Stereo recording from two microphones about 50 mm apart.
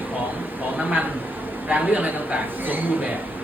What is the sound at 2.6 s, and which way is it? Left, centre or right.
Speech, right.